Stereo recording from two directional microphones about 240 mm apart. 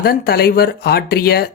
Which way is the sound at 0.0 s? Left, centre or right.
Left.